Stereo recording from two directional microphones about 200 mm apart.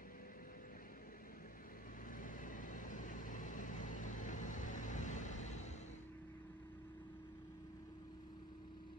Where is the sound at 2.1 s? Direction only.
40° left (ahead or behind).